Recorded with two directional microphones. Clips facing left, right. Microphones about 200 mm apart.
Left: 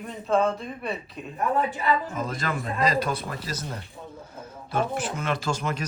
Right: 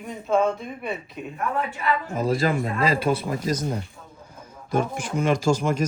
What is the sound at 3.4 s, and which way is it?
Speech, 50° right (ahead or behind).